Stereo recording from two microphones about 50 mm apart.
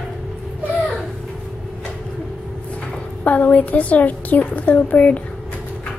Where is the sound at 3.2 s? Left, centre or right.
Left.